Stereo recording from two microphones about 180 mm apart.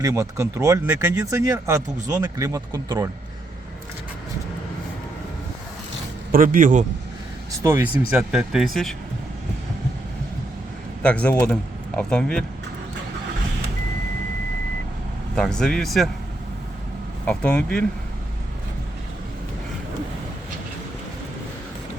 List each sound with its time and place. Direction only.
0.0 s speech: 15° right (ahead or behind)
6.3 s speech: 50° right (ahead or behind)
7.6 s speech: 15° right (ahead or behind)
11.0 s speech: 5° left (ahead or behind)
15.4 s speech: 5° left (ahead or behind)
17.2 s speech: 5° left (ahead or behind)